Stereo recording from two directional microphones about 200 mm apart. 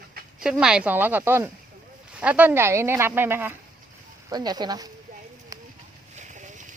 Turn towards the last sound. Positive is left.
turn(degrees=-35)  # may be behind; listen again after turning